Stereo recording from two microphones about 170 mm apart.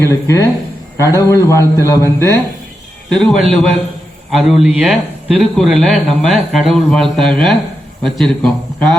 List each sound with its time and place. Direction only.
0.0 s a man's voice: 20° left (ahead or behind)
3.2 s a man's voice: centre (ahead or behind)